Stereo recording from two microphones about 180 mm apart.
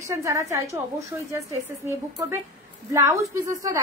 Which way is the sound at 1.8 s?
15° right (ahead or behind).